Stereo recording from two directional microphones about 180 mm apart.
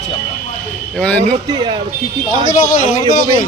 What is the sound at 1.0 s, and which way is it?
Speech, 5° left (ahead or behind).